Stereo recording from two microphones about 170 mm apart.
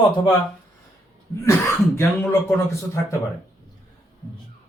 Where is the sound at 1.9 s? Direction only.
15° left (ahead or behind).